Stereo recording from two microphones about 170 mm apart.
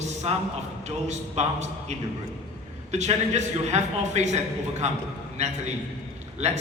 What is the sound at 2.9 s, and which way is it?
A man's voice, 40° right (ahead or behind).